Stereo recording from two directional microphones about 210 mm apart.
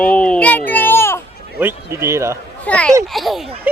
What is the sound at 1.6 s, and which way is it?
Speech, 10° right (ahead or behind).